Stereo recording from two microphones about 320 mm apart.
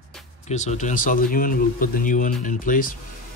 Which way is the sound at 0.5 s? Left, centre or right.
Left.